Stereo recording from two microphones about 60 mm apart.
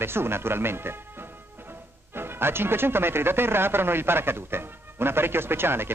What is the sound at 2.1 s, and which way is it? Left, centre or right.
Speech, right.